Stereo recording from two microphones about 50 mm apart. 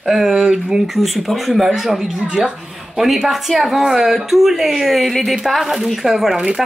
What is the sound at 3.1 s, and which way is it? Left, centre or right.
A woman's voice, centre.